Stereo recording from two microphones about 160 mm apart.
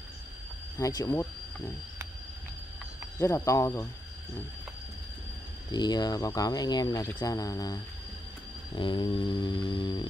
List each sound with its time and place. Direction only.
0.7 s speech: 20° left (ahead or behind)
3.2 s speech: 20° left (ahead or behind)
5.7 s speech: 25° left (ahead or behind)
8.7 s a sound: 30° left (ahead or behind)